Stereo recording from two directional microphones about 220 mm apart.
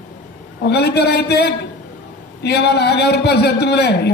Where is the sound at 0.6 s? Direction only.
50° left (ahead or behind).